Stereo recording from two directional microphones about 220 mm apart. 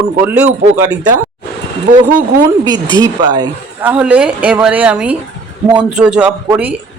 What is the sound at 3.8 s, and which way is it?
A woman's voice, 5° right (ahead or behind).